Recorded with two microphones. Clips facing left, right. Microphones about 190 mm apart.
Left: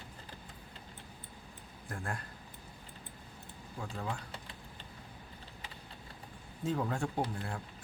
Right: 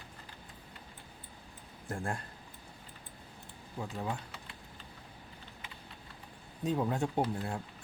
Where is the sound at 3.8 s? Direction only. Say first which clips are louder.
Right 2 dB; 20° right (ahead or behind).